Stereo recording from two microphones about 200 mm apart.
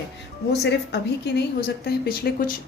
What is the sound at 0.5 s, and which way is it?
A woman's voice, 55° left (ahead or behind).